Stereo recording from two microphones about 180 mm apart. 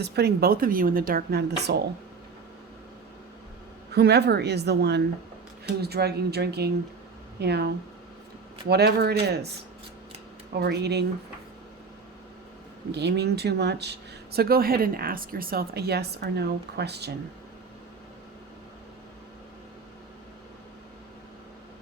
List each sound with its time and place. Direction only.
0.0 s speech: 65° right (ahead or behind)
3.9 s speech: 65° right (ahead or behind)
10.5 s speech: 65° right (ahead or behind)
12.9 s speech: 65° right (ahead or behind)